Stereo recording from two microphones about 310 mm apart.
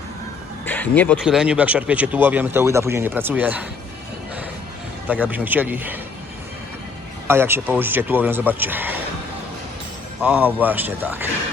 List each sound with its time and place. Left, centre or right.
0.6 s speech: centre
5.0 s speech: centre
7.3 s speech: centre
10.2 s speech: centre